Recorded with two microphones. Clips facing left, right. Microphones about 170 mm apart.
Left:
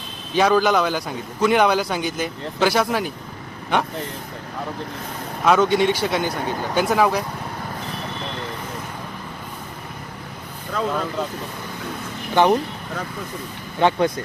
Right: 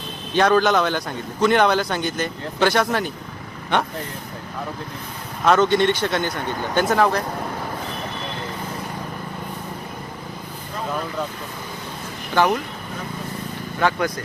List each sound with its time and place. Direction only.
0.3 s a man's voice: 5° left (ahead or behind)
5.5 s a man's voice: 5° left (ahead or behind)
12.3 s speech: 20° left (ahead or behind)
13.7 s speech: 20° left (ahead or behind)